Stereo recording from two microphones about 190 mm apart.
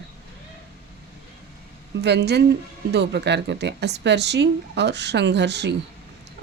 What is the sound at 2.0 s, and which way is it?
Speech, 60° right (ahead or behind).